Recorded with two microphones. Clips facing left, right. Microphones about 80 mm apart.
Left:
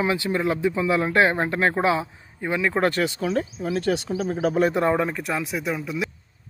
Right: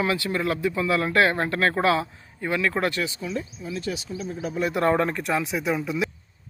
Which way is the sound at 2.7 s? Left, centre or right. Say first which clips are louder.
Left 4 dB; left.